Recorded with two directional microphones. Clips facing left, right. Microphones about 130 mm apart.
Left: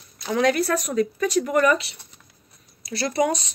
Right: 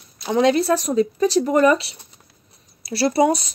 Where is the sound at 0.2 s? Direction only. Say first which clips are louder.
Right 4 dB; 25° right (ahead or behind).